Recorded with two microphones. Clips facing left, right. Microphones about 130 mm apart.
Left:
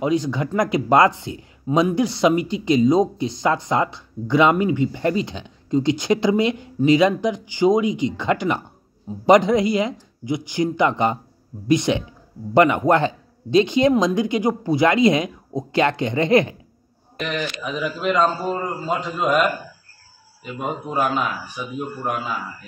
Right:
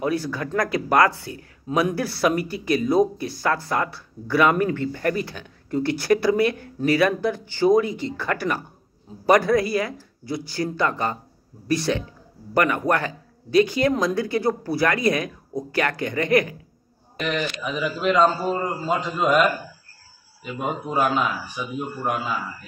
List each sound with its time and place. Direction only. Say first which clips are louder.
0.0 s speech: left 4 dB; 20° left (ahead or behind)
17.2 s a man's voice: even; centre (ahead or behind)